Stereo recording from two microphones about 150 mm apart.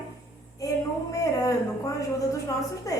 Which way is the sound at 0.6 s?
20° left (ahead or behind).